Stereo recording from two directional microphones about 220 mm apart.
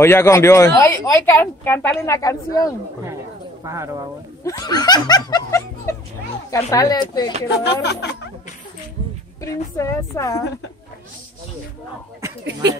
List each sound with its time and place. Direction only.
0.0 s speech: 10° left (ahead or behind)
3.6 s speech: 15° right (ahead or behind)
4.5 s speech: 15° left (ahead or behind)
7.5 s speech: 50° left (ahead or behind)
9.4 s speech: 15° left (ahead or behind)